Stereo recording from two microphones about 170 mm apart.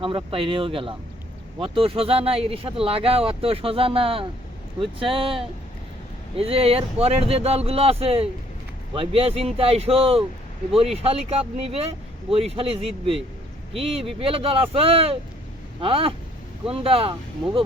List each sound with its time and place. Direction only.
0.0 s speech: 30° right (ahead or behind)